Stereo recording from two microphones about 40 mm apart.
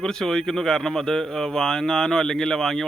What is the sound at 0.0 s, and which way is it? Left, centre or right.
Speech, centre.